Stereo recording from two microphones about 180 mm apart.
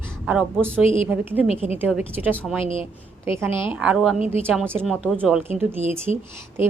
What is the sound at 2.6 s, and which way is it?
Speech, 30° left (ahead or behind).